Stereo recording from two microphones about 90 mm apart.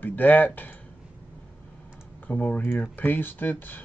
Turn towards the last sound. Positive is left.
turn(degrees=20)  # may be behind; listen again after turning